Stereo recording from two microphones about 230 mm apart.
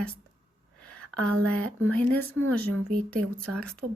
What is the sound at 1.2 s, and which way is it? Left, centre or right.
Speech, right.